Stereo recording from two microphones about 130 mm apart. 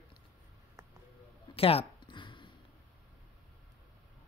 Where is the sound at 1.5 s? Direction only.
50° left (ahead or behind).